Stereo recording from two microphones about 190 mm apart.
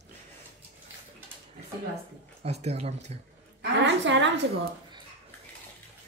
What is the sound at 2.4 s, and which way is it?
Speech, 35° right (ahead or behind).